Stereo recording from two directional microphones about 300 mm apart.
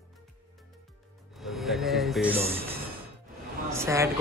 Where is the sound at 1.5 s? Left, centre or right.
Centre.